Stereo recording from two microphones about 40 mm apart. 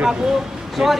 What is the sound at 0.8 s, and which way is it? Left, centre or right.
Speech, centre.